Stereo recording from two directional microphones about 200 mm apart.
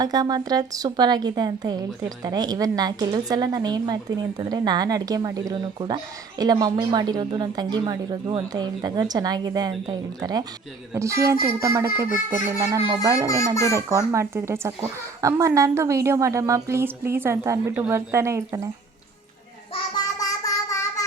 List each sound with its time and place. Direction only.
0.0 s a woman's voice: 20° right (ahead or behind)
13.2 s a child's voice: 15° left (ahead or behind)
14.1 s a woman's voice: 15° right (ahead or behind)
20.1 s a sound: 15° left (ahead or behind)